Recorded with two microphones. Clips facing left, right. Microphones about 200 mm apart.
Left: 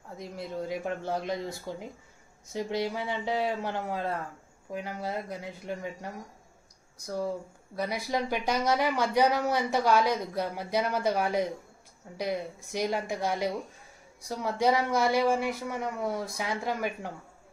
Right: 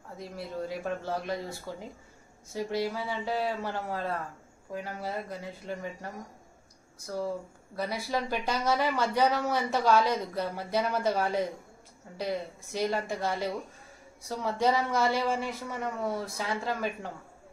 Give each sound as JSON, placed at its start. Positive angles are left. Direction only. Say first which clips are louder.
{"t": 0.2, "sound": "speech", "louder": "left 1 dB", "side_deg": 15}
{"t": 7.7, "sound": "speech", "louder": "left 1 dB", "side_deg": 15}